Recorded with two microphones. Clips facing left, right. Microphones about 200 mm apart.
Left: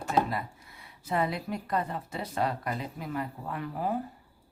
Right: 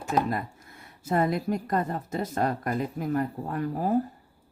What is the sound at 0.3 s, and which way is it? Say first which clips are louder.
A woman's voice: right 4 dB; 50° right (ahead or behind).